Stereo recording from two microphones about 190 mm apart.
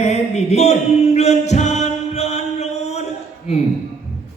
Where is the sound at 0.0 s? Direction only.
35° left (ahead or behind).